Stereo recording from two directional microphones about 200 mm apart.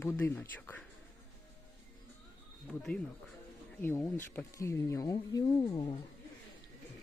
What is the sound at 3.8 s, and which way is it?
Speech, 10° left (ahead or behind).